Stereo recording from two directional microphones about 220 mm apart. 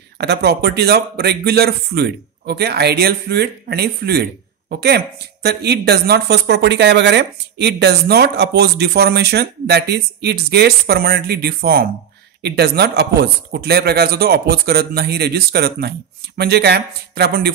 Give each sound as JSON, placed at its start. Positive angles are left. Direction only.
{"t": 0.2, "sound": "a man's voice", "side_deg": -50}